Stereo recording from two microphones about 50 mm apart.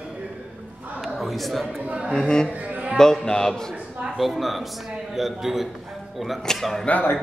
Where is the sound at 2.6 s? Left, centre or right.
Right.